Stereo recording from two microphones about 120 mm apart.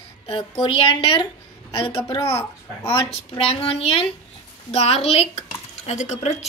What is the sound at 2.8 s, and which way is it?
A woman's voice, 50° left (ahead or behind).